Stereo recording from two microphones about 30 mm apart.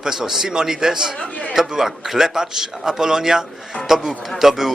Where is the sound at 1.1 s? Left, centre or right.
Left.